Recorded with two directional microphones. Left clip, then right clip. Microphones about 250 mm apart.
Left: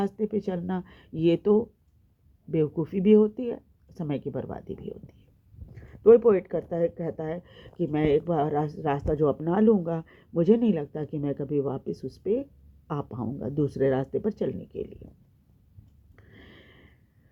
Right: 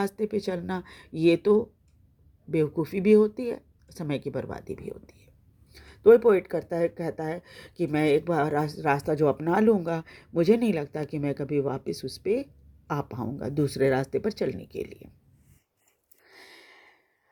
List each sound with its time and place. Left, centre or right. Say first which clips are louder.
0.2 s speech: right 1 dB; centre
12.9 s speech: right 2 dB; right
16.3 s a sound: right 3 dB; right